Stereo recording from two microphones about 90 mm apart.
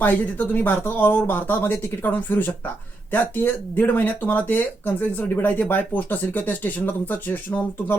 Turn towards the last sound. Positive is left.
turn(degrees=20)  # may be behind; listen again after turning